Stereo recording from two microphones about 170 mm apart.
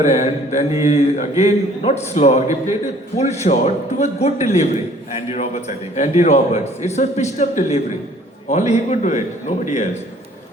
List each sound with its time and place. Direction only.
0.1 s a man's voice: 45° left (ahead or behind)